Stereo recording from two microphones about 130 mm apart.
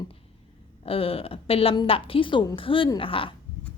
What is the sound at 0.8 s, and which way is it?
A woman's voice, 45° left (ahead or behind).